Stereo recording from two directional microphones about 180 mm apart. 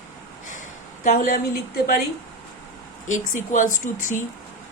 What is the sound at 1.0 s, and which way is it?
Speech, 50° left (ahead or behind).